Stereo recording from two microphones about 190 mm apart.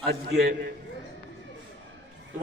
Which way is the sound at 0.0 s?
55° right (ahead or behind).